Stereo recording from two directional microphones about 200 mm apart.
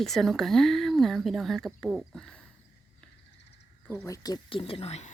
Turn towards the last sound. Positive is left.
turn(degrees=35)  # may be behind; listen again after turning